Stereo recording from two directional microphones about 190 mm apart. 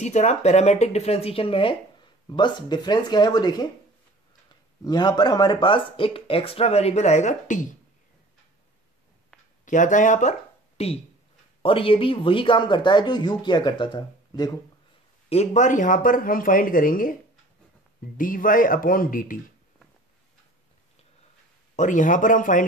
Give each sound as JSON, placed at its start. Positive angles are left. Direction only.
{"t": 0.0, "sound": "speech", "side_deg": 35}
{"t": 4.8, "sound": "speech", "side_deg": 20}
{"t": 9.7, "sound": "speech", "side_deg": 40}
{"t": 15.2, "sound": "speech", "side_deg": 35}
{"t": 21.7, "sound": "speech", "side_deg": 40}